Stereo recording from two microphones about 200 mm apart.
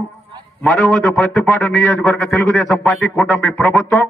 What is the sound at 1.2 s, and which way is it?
Speech, 15° left (ahead or behind).